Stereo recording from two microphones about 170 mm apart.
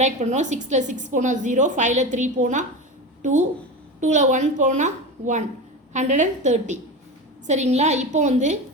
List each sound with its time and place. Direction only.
0.0 s a woman's voice: 45° right (ahead or behind)